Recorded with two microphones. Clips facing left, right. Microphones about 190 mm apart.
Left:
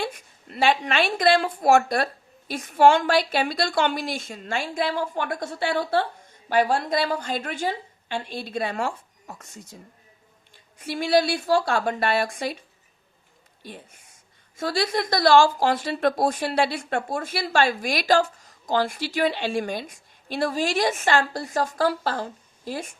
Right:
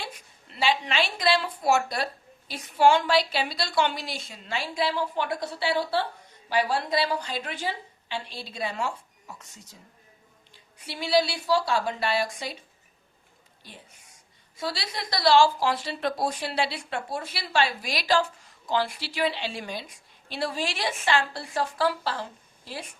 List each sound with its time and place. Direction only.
0.0 s speech: 50° left (ahead or behind)
13.6 s speech: 55° left (ahead or behind)